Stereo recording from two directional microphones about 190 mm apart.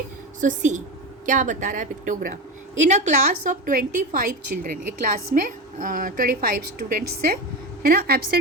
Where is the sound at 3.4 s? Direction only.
45° right (ahead or behind).